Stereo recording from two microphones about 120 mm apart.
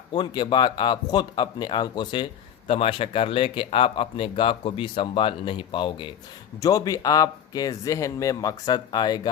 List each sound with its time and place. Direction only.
0.1 s speech: 40° left (ahead or behind)
6.6 s speech: 30° left (ahead or behind)